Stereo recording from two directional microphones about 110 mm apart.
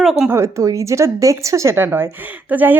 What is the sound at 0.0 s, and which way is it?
Speech, 5° right (ahead or behind).